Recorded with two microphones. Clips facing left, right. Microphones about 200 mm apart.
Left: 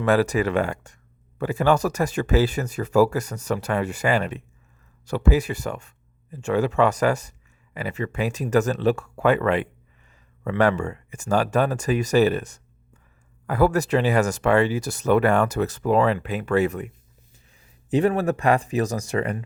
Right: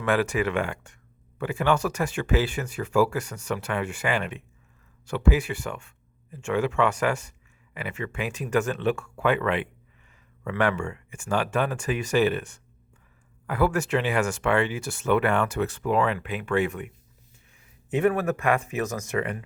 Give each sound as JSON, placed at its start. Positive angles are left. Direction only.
{"t": 0.0, "sound": "speech", "side_deg": 40}
{"t": 17.9, "sound": "speech", "side_deg": 30}